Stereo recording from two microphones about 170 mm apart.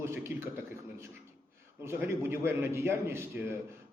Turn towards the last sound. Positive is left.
turn(degrees=-15)  # may be behind; listen again after turning